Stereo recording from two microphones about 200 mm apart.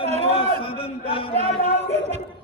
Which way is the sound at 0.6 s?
25° left (ahead or behind).